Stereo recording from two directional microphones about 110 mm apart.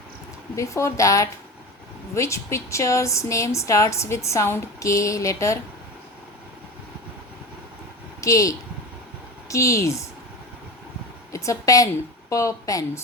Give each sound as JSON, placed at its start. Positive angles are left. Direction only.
{"t": 0.5, "sound": "a woman's voice", "side_deg": 25}
{"t": 8.2, "sound": "a woman's voice", "side_deg": 30}
{"t": 11.3, "sound": "a woman's voice", "side_deg": 30}